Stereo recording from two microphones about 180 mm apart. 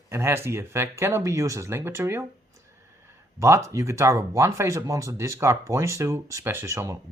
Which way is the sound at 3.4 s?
15° right (ahead or behind).